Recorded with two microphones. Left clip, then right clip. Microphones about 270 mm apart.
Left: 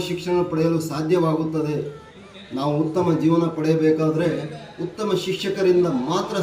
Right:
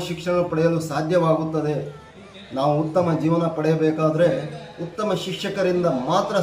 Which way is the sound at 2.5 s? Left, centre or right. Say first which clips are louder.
Right 2 dB; centre.